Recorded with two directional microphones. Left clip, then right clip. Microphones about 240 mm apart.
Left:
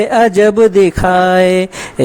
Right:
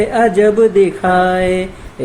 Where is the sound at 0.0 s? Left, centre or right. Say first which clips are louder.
Left 2 dB; left.